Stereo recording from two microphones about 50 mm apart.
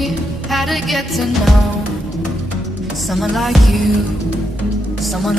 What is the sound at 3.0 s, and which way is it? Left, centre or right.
Music, centre.